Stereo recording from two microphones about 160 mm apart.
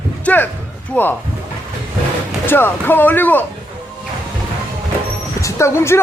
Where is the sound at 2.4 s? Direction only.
15° left (ahead or behind).